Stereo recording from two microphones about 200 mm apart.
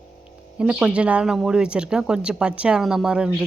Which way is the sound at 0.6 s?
5° right (ahead or behind).